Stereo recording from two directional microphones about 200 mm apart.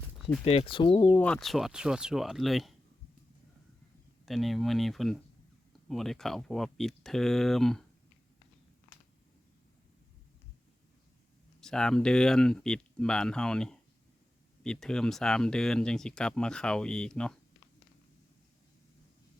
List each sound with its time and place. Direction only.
0.4 s speech: 30° left (ahead or behind)
1.1 s speech: 5° left (ahead or behind)
4.3 s speech: centre (ahead or behind)
11.6 s speech: 5° left (ahead or behind)